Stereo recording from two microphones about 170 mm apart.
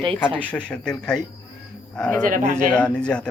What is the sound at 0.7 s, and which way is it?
Speech, 5° left (ahead or behind).